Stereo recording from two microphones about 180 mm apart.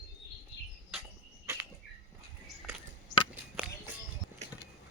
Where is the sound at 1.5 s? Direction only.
15° right (ahead or behind).